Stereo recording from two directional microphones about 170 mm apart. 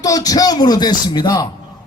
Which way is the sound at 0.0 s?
20° left (ahead or behind).